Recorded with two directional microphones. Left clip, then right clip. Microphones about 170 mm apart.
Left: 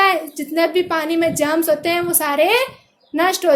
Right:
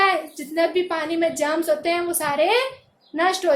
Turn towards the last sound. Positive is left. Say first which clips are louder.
# left 3 dB
turn(degrees=50)  # may be behind; listen again after turning